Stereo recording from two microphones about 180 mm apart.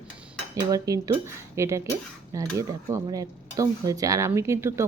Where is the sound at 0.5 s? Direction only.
20° right (ahead or behind).